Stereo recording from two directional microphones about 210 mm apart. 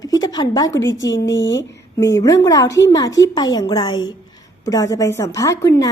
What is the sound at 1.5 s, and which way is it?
A woman's voice, 15° left (ahead or behind).